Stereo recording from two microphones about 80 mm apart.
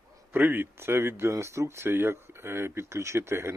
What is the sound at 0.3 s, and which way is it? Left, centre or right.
Speech, right.